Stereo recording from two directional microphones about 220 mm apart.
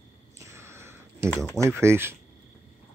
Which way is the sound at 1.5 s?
15° right (ahead or behind).